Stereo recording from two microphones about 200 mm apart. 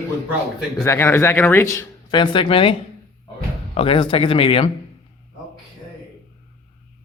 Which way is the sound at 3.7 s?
25° left (ahead or behind).